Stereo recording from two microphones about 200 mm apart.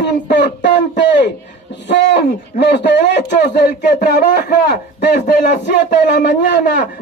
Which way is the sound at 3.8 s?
45° left (ahead or behind).